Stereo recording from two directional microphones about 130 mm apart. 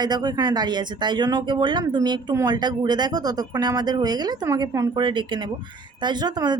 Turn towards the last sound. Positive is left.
turn(degrees=-35)  # may be behind; listen again after turning